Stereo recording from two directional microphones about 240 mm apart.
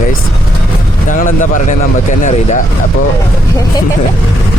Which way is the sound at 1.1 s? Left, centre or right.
Left.